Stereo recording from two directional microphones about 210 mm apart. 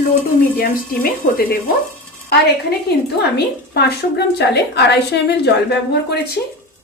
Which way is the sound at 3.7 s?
50° left (ahead or behind).